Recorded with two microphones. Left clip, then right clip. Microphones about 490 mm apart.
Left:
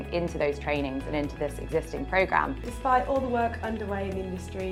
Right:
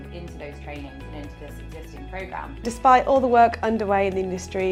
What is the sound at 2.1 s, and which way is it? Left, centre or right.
Speech, left.